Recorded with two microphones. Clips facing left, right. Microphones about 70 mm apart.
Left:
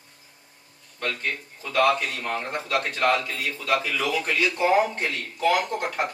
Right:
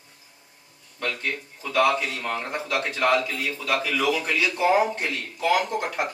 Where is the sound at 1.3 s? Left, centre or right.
Centre.